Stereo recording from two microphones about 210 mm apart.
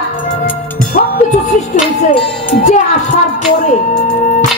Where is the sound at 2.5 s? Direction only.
35° left (ahead or behind).